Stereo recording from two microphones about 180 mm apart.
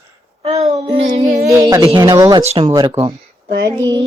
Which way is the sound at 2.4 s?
35° right (ahead or behind).